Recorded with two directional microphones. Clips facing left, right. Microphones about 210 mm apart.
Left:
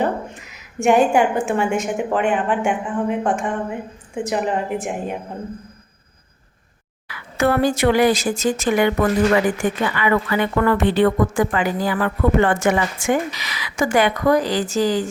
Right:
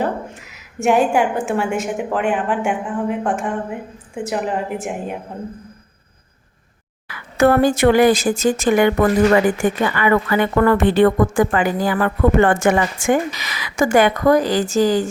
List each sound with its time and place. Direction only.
0.0 s speech: 5° right (ahead or behind)
7.1 s a woman's voice: 50° right (ahead or behind)
9.9 s a woman's voice: 45° right (ahead or behind)